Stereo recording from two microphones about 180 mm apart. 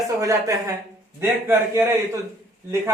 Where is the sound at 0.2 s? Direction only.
15° right (ahead or behind).